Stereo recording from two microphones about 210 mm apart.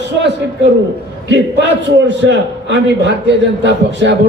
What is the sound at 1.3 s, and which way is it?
A man's voice, 55° right (ahead or behind).